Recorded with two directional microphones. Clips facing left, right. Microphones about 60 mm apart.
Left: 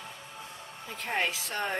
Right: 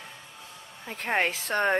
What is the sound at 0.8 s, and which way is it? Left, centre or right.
Speech, right.